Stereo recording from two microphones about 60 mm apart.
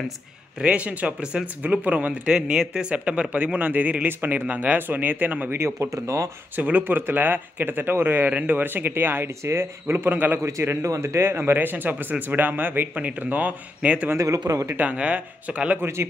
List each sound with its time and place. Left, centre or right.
0.6 s speech: right
2.3 s speech: centre; by 5.5 s right
5.8 s speech: right
6.5 s speech: right
8.3 s speech: right
10.4 s a man's voice: right
14.1 s a man's voice: right
14.8 s speech: right